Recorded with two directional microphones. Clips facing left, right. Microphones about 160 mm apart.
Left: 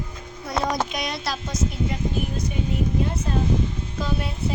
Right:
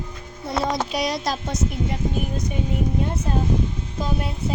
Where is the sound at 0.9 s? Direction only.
35° right (ahead or behind).